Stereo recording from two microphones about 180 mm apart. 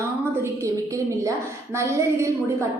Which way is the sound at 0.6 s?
15° right (ahead or behind).